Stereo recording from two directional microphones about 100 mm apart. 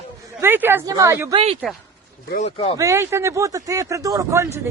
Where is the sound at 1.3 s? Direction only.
65° right (ahead or behind).